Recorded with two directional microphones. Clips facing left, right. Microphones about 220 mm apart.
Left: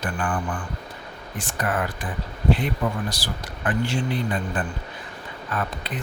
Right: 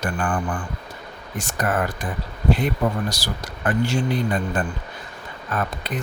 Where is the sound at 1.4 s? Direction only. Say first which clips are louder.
Right 3 dB; 45° right (ahead or behind).